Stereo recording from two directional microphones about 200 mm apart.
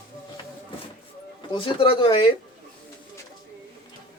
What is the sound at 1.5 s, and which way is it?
Speech, 25° left (ahead or behind).